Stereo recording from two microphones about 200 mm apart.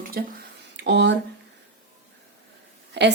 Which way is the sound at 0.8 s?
60° right (ahead or behind).